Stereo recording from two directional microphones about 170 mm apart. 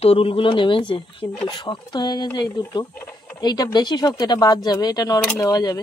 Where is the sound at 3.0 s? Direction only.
15° left (ahead or behind).